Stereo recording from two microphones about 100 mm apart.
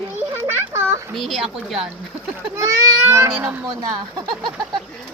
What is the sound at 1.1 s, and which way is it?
Speech, centre (ahead or behind).